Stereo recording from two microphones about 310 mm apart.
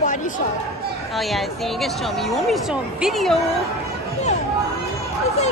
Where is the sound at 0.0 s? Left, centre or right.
Left.